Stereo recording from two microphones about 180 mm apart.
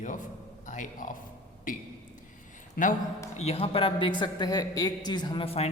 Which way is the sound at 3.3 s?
35° left (ahead or behind).